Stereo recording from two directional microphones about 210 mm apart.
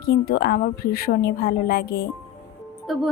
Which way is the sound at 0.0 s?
45° left (ahead or behind).